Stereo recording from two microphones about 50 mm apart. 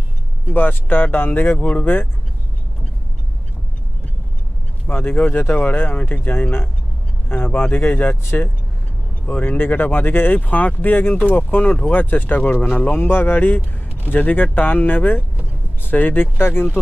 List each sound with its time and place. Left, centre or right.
0.5 s speech: left
1.6 s speech: left
4.8 s speech: left
9.2 s speech: left